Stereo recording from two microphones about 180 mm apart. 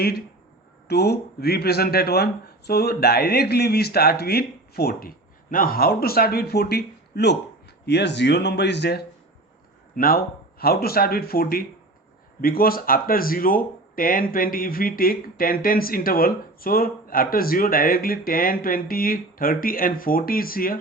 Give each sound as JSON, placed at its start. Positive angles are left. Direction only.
{"t": 0.9, "sound": "speech", "side_deg": 65}
{"t": 9.9, "sound": "speech", "side_deg": 55}